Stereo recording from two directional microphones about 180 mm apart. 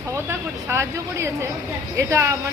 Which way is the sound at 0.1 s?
15° right (ahead or behind).